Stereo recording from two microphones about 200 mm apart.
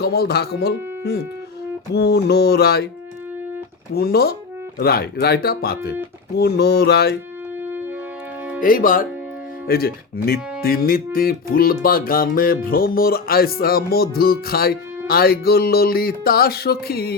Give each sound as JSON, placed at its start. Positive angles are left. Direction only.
{"t": 0.0, "sound": "speech", "side_deg": 50}
{"t": 3.9, "sound": "speech", "side_deg": 50}
{"t": 8.6, "sound": "speech", "side_deg": 45}